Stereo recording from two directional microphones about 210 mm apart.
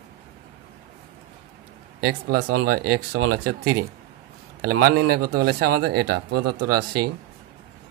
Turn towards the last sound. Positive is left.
turn(degrees=-50)  # may be behind; listen again after turning